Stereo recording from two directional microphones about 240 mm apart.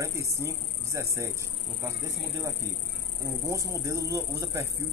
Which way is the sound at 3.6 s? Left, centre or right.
Centre.